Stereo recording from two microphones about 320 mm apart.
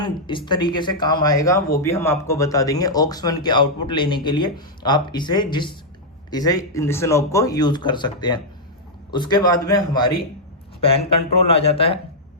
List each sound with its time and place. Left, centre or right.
0.0 s speech: centre